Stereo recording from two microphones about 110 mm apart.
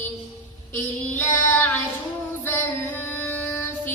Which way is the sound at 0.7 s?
20° left (ahead or behind).